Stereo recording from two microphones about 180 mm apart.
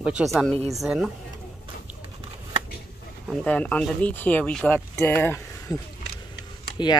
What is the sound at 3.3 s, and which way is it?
Speech, 5° left (ahead or behind).